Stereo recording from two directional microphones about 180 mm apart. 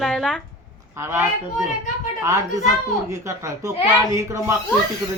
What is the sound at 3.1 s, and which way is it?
A woman's voice, 15° right (ahead or behind).